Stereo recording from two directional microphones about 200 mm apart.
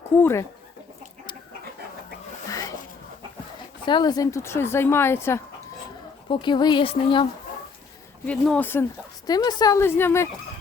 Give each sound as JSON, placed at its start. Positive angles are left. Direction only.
{"t": 0.2, "sound": "a woman's voice", "side_deg": 10}
{"t": 2.5, "sound": "a sound", "side_deg": 15}
{"t": 3.8, "sound": "a woman's voice", "side_deg": 20}
{"t": 6.2, "sound": "speech", "side_deg": 25}
{"t": 8.3, "sound": "a woman's voice", "side_deg": 5}